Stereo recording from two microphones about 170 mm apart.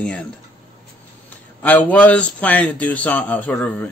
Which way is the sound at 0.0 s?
5° left (ahead or behind).